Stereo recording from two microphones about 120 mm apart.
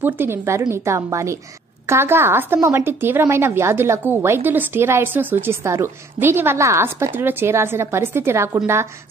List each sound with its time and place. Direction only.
0.0 s a woman's voice: 20° right (ahead or behind)